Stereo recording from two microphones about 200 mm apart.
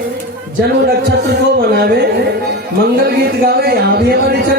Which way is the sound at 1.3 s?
55° right (ahead or behind).